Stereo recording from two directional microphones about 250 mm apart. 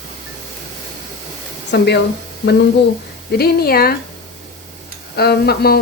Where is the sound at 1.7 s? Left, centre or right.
Left.